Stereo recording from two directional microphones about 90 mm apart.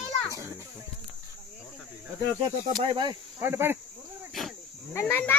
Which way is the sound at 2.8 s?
70° right (ahead or behind).